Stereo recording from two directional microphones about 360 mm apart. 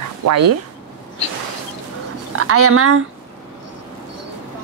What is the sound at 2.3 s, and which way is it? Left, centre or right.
Speech, right.